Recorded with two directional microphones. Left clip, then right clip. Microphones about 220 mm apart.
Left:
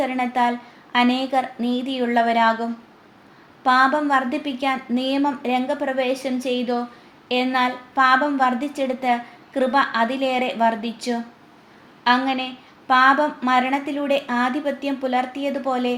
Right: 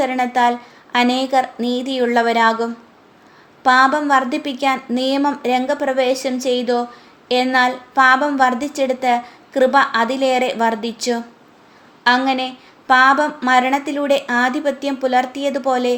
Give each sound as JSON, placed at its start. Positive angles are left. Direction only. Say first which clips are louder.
{"t": 0.0, "sound": "a woman's voice", "louder": "right 5 dB", "side_deg": -50}